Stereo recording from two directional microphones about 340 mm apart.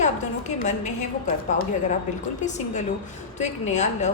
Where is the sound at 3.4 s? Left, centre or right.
Centre.